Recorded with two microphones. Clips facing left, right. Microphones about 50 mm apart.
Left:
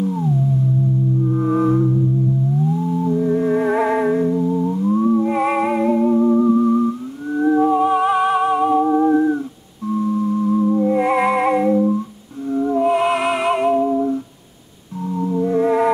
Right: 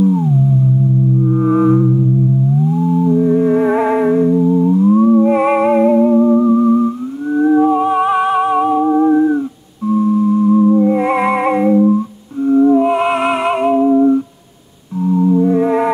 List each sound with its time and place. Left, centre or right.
1.2 s music: centre
3.0 s music: centre
10.2 s music: centre
15.0 s music: centre